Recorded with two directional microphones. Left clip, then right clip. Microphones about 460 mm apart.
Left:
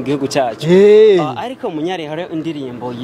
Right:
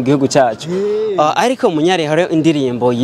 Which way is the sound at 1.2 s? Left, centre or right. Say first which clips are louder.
Right 9 dB; right.